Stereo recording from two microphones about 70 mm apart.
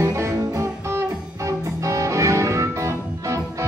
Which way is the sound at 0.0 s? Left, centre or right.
Right.